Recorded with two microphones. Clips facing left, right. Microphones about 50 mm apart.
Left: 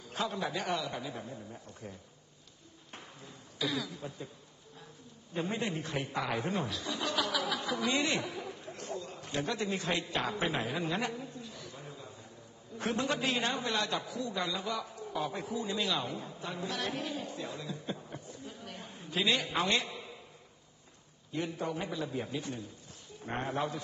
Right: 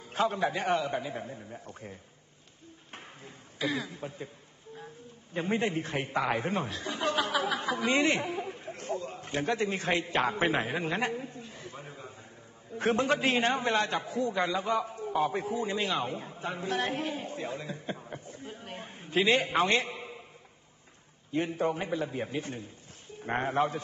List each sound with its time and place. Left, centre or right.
0.0 s a man's voice: right
2.9 s a sound: right
4.7 s a man's voice: right
21.3 s a man's voice: right